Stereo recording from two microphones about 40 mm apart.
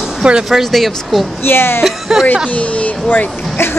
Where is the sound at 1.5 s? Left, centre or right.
Left.